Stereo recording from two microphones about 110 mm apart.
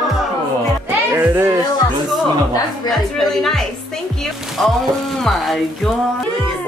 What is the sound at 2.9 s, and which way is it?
Speech, centre (ahead or behind).